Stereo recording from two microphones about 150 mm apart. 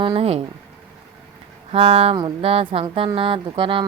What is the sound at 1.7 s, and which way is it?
Speech, 40° right (ahead or behind).